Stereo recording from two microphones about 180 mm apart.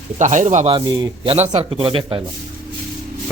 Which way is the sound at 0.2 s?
45° right (ahead or behind).